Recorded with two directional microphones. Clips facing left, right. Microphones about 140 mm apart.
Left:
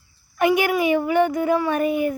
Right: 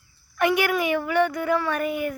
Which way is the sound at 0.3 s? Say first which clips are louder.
Left 3 dB; 20° left (ahead or behind).